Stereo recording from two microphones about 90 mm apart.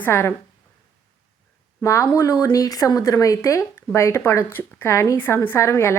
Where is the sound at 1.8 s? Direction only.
35° left (ahead or behind).